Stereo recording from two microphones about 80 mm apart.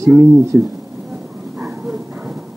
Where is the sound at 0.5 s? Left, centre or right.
Centre.